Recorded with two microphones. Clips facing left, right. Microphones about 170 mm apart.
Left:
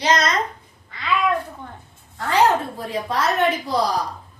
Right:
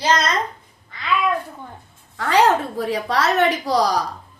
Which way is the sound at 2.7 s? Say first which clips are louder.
Right 3 dB; 80° right.